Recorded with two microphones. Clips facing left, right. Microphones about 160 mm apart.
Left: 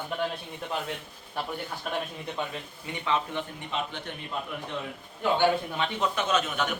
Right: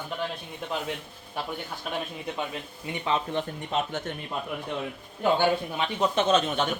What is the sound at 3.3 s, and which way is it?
Speech, 45° right (ahead or behind).